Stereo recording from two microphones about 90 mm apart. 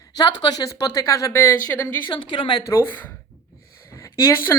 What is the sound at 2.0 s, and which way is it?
Speech, 65° left (ahead or behind).